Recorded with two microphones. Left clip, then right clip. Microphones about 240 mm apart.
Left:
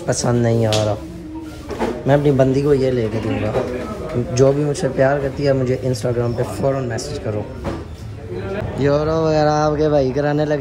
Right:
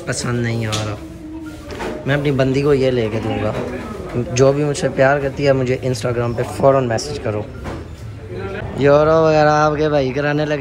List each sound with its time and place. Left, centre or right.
0.0 s a man's voice: centre
2.0 s a man's voice: centre
8.7 s speech: centre